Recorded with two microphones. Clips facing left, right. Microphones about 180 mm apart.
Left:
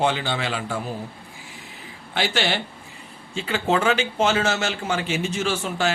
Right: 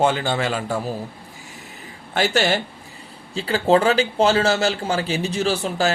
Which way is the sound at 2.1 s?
45° right (ahead or behind).